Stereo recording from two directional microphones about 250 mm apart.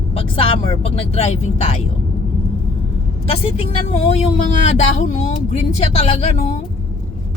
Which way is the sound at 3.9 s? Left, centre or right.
Left.